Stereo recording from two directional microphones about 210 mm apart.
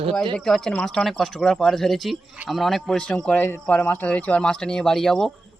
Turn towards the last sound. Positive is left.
turn(degrees=0)  # may be behind; listen again after turning